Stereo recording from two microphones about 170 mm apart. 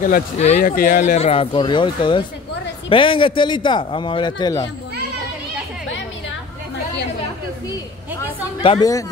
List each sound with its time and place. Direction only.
0.6 s a man's voice: 60° left (ahead or behind); by 4.6 s 25° left (ahead or behind)
8.6 s a man's voice: 20° left (ahead or behind)